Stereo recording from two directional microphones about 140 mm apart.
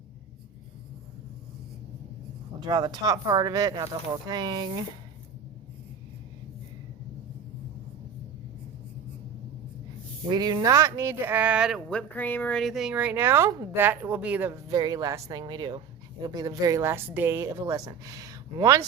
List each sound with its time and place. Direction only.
2.6 s a woman's voice: 30° right (ahead or behind)
10.2 s a woman's voice: 30° right (ahead or behind); by 11.8 s 5° right (ahead or behind)
11.9 s speech: 10° left (ahead or behind); by 14.6 s 15° right (ahead or behind)
14.7 s a woman's voice: 30° right (ahead or behind)